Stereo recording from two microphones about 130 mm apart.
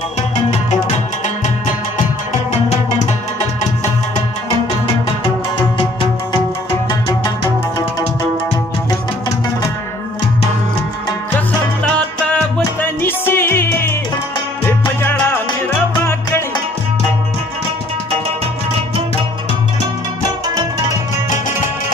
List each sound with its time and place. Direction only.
0.5 s music: 55° left (ahead or behind)
6.9 s music: 30° left (ahead or behind)
11.3 s music: 10° left (ahead or behind)
15.0 s music: 15° left (ahead or behind)